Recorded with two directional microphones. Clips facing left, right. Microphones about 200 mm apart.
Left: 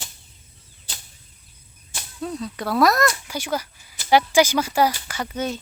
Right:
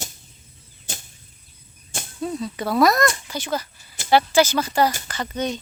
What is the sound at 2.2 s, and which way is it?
Speech, centre (ahead or behind).